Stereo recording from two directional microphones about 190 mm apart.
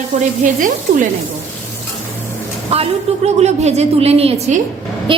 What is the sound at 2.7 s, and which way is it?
A woman's voice, 35° right (ahead or behind).